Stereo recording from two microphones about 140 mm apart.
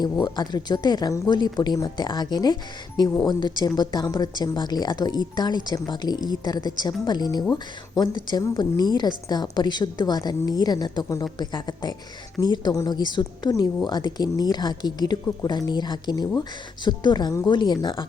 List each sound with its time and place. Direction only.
0.0 s a woman's voice: 30° left (ahead or behind)